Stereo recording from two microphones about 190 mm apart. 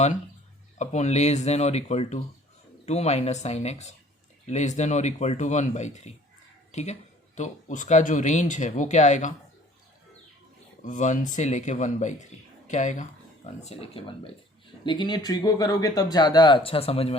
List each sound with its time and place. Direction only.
0.8 s speech: 35° left (ahead or behind)
10.8 s speech: 40° left (ahead or behind)